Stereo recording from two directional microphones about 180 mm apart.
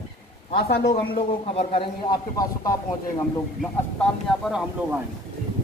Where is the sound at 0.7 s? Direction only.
60° left (ahead or behind).